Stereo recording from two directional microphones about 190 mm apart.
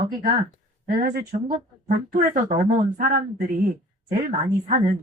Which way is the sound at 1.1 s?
45° right (ahead or behind).